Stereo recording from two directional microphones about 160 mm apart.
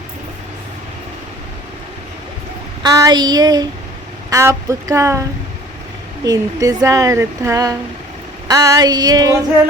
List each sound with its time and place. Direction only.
2.8 s speech: 20° right (ahead or behind)
6.2 s speech: 20° right (ahead or behind)